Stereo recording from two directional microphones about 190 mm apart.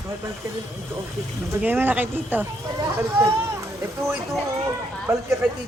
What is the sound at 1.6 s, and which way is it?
Speech, 10° right (ahead or behind).